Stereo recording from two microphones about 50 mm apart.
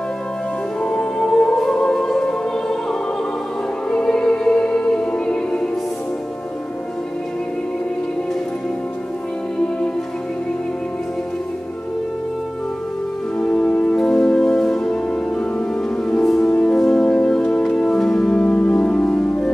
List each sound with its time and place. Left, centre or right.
0.7 s music: centre
13.4 s music: centre